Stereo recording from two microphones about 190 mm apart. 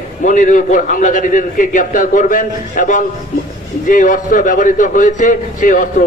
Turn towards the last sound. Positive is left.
turn(degrees=45)  # may be behind; listen again after turning